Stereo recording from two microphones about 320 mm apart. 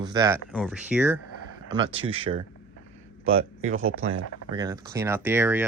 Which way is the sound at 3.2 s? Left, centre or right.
Right.